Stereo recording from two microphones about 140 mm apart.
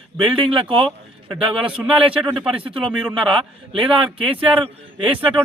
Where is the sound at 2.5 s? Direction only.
40° right (ahead or behind).